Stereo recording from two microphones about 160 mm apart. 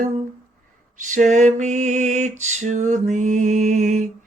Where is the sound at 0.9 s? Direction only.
50° right (ahead or behind).